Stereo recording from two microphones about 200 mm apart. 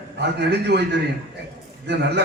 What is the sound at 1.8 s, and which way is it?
Speech, 60° right (ahead or behind).